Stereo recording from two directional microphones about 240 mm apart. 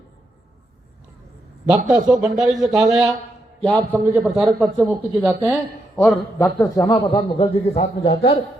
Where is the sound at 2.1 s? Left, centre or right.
Centre.